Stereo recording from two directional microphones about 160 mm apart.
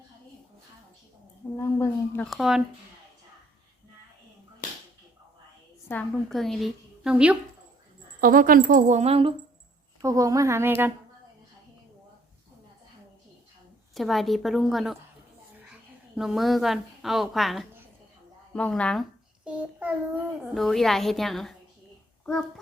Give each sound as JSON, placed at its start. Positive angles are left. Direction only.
{"t": 1.5, "sound": "a woman's voice", "side_deg": 15}
{"t": 2.2, "sound": "a woman's voice", "side_deg": 0}
{"t": 5.9, "sound": "a woman's voice", "side_deg": 5}
{"t": 8.2, "sound": "speech", "side_deg": -60}
{"t": 10.0, "sound": "speech", "side_deg": -20}
{"t": 13.9, "sound": "a woman's voice", "side_deg": 0}
{"t": 19.5, "sound": "child singing", "side_deg": -10}
{"t": 20.5, "sound": "a woman's voice", "side_deg": 0}